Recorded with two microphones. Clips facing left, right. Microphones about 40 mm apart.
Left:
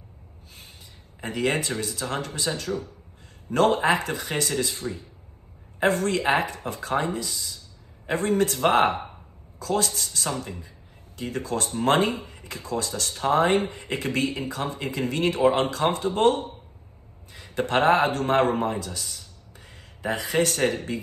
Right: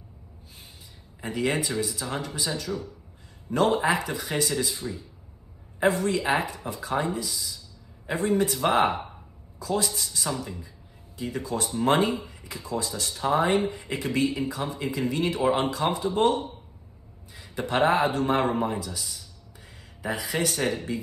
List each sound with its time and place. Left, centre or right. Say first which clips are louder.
1.2 s speech: left 1 dB; left
13.1 s speech: left 2 dB; left